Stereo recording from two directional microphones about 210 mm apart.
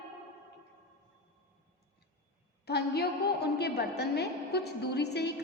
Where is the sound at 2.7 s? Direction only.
50° left (ahead or behind).